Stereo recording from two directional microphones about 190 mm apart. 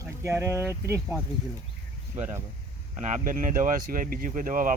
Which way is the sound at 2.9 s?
40° right (ahead or behind).